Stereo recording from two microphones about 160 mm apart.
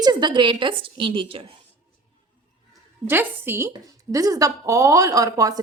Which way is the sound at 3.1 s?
15° right (ahead or behind).